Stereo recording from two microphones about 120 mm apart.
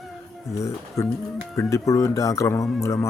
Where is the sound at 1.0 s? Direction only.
25° left (ahead or behind).